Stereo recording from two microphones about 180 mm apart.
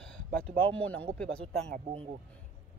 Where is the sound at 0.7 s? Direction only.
10° left (ahead or behind).